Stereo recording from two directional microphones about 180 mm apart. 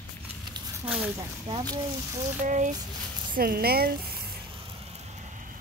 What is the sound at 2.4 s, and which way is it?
Speech, 45° right (ahead or behind).